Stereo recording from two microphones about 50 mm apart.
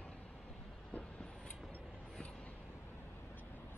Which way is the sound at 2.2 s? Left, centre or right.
Left.